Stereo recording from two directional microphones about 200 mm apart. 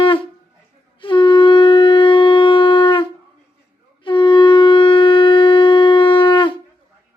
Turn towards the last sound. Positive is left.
turn(degrees=25)  # may be behind; listen again after turning